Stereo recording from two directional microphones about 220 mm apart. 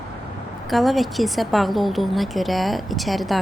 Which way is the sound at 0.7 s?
Centre (ahead or behind).